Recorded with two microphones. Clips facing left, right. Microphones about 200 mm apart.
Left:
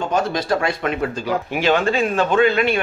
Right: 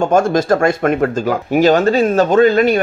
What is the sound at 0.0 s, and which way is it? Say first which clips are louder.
Speech: right 8 dB; 45° right (ahead or behind).